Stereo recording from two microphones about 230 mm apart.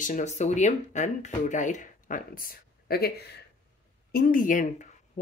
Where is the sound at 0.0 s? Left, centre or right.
Left.